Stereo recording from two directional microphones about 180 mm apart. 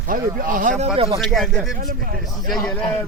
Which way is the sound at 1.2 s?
Centre (ahead or behind).